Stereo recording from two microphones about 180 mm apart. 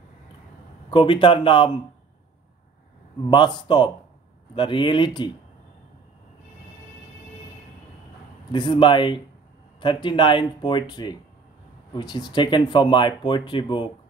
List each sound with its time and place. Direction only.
0.8 s speech: 25° left (ahead or behind)
3.3 s speech: 25° left (ahead or behind)
8.5 s speech: 25° left (ahead or behind)